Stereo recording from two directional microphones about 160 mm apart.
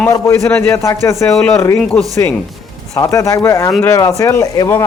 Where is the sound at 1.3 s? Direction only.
5° left (ahead or behind).